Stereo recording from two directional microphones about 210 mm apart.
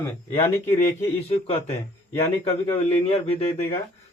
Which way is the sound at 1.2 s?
30° left (ahead or behind).